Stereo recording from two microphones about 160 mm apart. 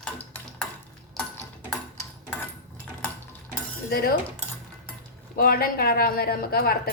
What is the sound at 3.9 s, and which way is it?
Speech, 70° left (ahead or behind).